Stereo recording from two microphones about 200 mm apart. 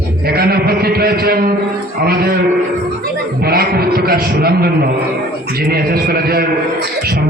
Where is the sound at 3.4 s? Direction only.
50° right (ahead or behind).